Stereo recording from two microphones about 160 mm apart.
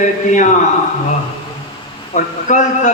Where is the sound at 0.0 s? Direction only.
50° left (ahead or behind).